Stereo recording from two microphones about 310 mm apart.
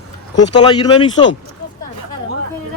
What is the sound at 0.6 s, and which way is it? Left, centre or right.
Speech, centre.